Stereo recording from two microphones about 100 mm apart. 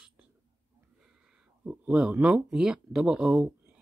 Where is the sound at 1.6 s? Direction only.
15° right (ahead or behind).